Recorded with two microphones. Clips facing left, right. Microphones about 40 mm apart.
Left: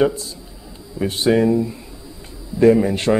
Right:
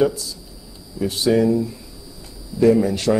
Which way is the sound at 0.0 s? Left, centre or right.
Left.